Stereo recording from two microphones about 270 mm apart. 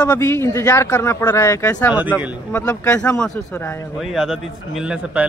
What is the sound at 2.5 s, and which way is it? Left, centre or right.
Speech, centre.